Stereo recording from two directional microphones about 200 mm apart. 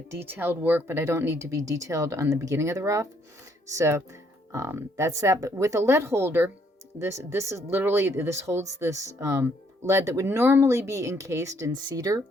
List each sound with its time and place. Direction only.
0.1 s speech: 10° right (ahead or behind)